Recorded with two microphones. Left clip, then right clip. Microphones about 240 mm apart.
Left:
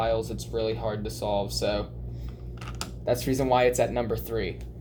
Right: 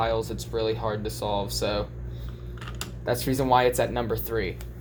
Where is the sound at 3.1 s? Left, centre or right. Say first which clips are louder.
Right 1 dB; right.